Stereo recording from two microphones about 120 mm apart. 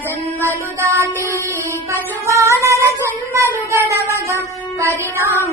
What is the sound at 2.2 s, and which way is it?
Music, 25° right (ahead or behind).